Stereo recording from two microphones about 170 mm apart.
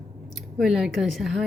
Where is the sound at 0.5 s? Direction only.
5° right (ahead or behind).